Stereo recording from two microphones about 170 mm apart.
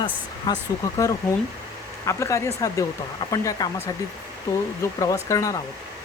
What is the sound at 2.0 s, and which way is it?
Speech, 15° left (ahead or behind).